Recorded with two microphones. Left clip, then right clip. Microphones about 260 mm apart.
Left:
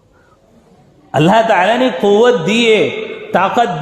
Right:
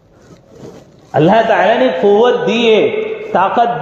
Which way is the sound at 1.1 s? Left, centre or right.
Left.